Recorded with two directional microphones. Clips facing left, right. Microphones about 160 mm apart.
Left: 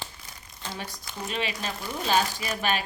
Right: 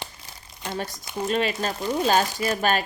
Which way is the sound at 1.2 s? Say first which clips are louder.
Right 7 dB; 45° right (ahead or behind).